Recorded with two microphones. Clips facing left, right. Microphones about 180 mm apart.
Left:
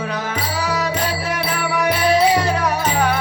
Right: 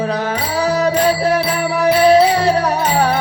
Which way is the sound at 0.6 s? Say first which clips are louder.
Right 9 dB; 35° right (ahead or behind).